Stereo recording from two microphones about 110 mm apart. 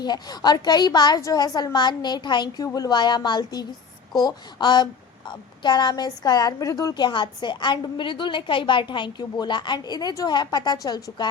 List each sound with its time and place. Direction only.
0.0 s a woman's voice: 40° left (ahead or behind)